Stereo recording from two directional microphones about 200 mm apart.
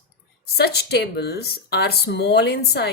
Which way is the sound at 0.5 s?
55° left (ahead or behind).